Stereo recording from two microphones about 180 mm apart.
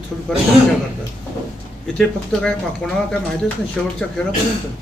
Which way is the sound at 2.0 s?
5° left (ahead or behind).